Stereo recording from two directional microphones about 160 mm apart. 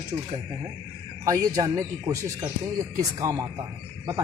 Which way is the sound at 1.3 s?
20° right (ahead or behind).